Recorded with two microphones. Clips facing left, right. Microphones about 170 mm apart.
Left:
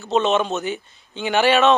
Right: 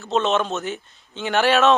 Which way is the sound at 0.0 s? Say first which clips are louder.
Left 2 dB; centre (ahead or behind).